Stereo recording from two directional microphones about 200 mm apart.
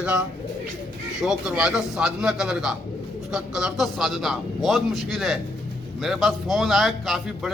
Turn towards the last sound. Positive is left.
turn(degrees=0)  # may be behind; listen again after turning